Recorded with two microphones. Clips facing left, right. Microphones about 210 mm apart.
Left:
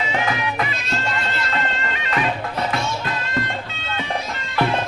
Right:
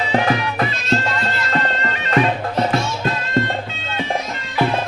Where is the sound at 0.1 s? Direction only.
35° right (ahead or behind).